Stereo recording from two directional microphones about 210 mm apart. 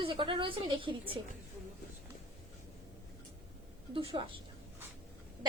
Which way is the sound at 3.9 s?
25° right (ahead or behind).